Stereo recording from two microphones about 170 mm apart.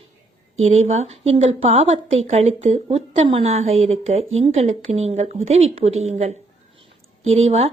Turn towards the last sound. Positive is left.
turn(degrees=-35)  # may be behind; listen again after turning